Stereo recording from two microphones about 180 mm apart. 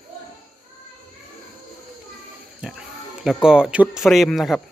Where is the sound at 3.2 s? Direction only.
5° right (ahead or behind).